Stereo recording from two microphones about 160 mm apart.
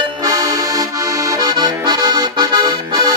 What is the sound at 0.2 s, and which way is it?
Accordion, 20° right (ahead or behind).